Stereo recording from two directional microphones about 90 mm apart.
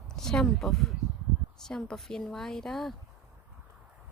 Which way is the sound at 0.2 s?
5° left (ahead or behind).